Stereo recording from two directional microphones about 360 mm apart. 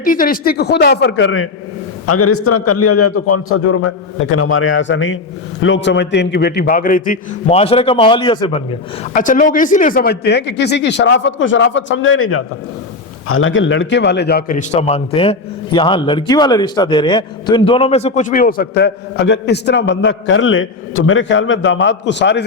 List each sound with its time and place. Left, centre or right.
0.0 s a man's voice: left